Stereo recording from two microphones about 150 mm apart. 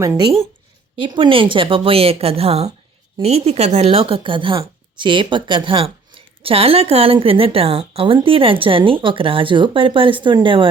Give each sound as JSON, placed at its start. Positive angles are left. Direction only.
{"t": 0.2, "sound": "speech", "side_deg": -35}